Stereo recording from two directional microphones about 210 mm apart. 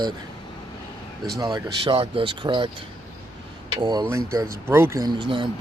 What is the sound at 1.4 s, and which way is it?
Speech, 20° right (ahead or behind).